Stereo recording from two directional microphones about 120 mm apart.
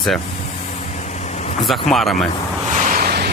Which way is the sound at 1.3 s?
70° left (ahead or behind).